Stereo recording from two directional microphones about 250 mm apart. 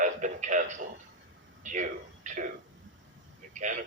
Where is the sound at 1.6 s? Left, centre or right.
Right.